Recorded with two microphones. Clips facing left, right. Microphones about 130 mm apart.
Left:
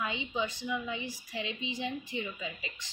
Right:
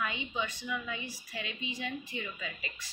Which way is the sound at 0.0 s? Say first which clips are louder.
Left 1 dB; 25° left (ahead or behind).